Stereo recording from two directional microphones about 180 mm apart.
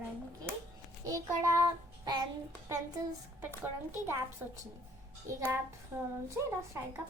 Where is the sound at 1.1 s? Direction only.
20° right (ahead or behind).